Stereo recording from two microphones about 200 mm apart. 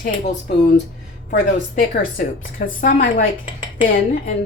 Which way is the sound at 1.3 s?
45° left (ahead or behind).